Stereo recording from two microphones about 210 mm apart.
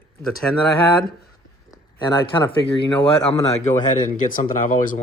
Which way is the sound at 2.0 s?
15° left (ahead or behind).